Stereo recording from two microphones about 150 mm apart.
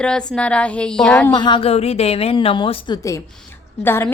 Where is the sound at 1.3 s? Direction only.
30° left (ahead or behind).